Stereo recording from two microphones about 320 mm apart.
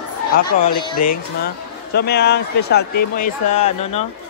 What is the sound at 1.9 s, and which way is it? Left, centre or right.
A man's voice, left.